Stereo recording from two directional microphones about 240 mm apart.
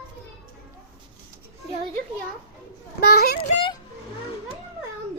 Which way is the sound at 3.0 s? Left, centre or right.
Left.